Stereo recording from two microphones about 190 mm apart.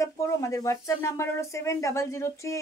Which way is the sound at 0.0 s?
15° left (ahead or behind).